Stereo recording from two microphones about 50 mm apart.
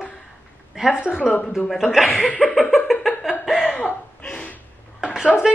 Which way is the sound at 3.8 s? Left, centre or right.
Left.